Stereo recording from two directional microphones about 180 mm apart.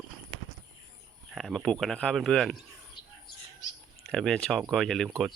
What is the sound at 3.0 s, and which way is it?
Bird, 25° left (ahead or behind).